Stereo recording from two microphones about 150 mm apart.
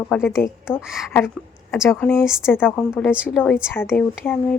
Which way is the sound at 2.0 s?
10° left (ahead or behind).